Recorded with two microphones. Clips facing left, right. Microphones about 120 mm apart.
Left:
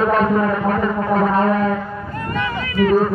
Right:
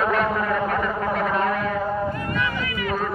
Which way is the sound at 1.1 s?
35° left (ahead or behind).